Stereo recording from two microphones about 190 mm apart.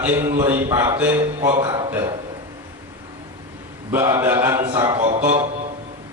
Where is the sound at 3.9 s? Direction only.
15° right (ahead or behind).